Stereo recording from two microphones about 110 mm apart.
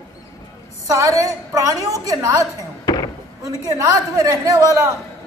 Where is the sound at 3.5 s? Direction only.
30° right (ahead or behind).